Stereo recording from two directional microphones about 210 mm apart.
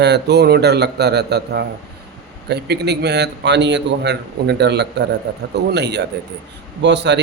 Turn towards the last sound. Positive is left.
turn(degrees=-55)  # may be behind; listen again after turning